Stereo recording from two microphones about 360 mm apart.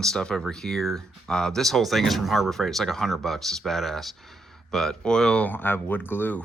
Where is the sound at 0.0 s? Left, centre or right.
Centre.